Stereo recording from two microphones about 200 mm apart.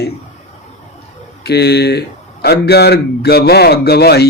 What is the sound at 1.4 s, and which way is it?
Speech, 55° left (ahead or behind).